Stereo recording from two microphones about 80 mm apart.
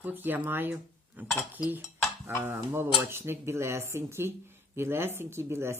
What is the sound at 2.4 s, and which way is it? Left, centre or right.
Speech, right.